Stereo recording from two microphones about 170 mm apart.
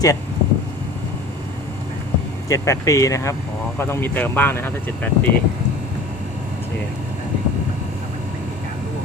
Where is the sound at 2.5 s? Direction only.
20° left (ahead or behind).